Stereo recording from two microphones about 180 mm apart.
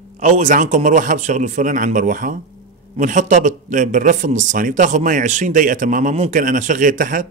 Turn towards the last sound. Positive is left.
turn(degrees=-45)  # may be behind; listen again after turning